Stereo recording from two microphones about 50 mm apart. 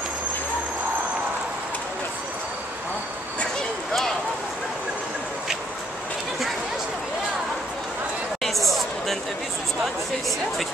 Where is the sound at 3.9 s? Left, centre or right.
Centre.